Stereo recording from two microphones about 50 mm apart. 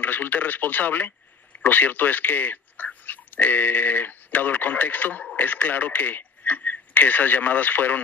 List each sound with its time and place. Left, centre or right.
0.0 s speech: left